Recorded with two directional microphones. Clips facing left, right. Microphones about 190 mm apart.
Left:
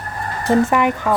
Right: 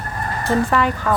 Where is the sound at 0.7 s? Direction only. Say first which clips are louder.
Left 2 dB; 15° left (ahead or behind).